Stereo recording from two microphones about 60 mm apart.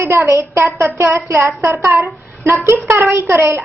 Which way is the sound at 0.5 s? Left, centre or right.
Right.